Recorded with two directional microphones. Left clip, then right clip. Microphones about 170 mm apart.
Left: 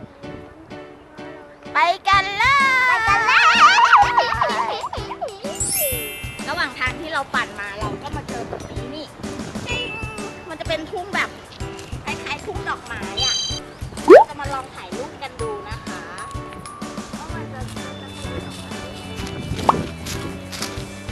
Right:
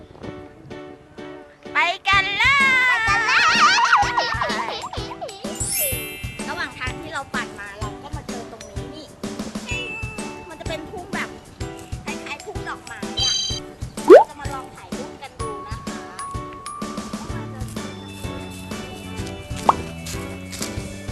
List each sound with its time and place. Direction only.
1.7 s music: 10° right (ahead or behind)
5.6 s music: centre (ahead or behind)
9.6 s music: centre (ahead or behind)
10.7 s music: 30° right (ahead or behind)
12.0 s music: 5° right (ahead or behind)
19.5 s plop: centre (ahead or behind)